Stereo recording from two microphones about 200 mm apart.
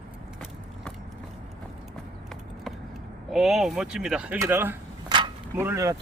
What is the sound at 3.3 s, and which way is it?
Speech, centre (ahead or behind).